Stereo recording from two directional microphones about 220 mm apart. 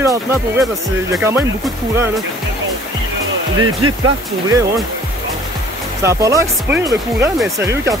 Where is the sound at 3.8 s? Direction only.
75° right (ahead or behind).